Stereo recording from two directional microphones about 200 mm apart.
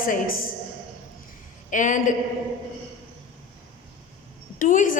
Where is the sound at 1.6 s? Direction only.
40° left (ahead or behind).